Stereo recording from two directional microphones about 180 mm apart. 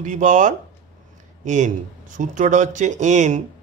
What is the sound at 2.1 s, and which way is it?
Speech, 45° right (ahead or behind).